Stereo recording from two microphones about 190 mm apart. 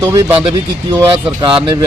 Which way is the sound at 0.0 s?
15° right (ahead or behind).